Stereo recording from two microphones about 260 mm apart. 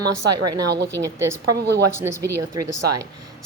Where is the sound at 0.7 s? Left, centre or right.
Right.